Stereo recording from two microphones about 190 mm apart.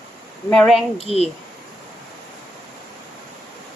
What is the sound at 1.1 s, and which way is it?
Speech, 35° right (ahead or behind).